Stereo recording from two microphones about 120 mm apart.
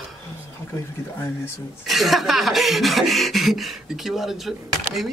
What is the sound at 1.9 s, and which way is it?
Speech, centre (ahead or behind).